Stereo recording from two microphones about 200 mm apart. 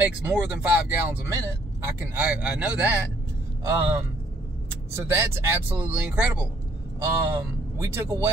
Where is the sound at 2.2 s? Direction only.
5° right (ahead or behind).